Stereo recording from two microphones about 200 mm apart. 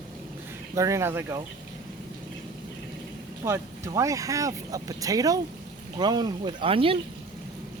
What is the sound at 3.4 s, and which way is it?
Speech, 15° right (ahead or behind).